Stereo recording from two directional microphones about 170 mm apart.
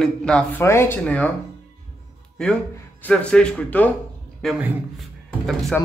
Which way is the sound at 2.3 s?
5° left (ahead or behind).